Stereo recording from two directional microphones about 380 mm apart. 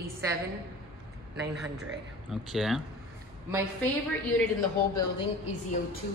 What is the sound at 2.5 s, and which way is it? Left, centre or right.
Speech, centre.